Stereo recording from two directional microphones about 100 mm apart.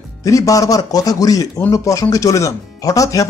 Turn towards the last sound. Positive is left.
turn(degrees=35)  # may be behind; listen again after turning